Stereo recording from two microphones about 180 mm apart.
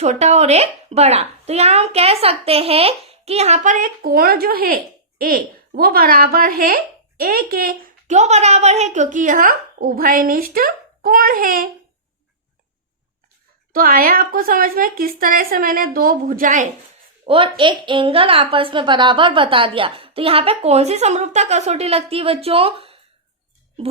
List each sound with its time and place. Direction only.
0.0 s speech: 40° right (ahead or behind)
13.7 s speech: 50° right (ahead or behind)
17.2 s a woman's voice: 30° right (ahead or behind)